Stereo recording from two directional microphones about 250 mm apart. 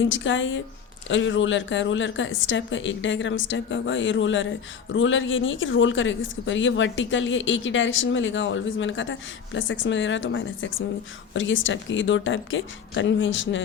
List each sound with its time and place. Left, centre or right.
0.0 s speech: left